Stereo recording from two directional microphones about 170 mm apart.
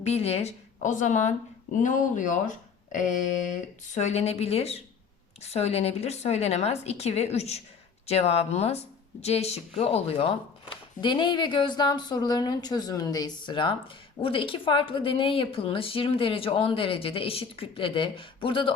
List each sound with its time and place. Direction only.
0.0 s a woman's voice: 40° left (ahead or behind)